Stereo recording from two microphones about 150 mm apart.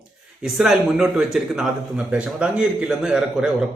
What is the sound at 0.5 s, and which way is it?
A man's voice, 5° right (ahead or behind).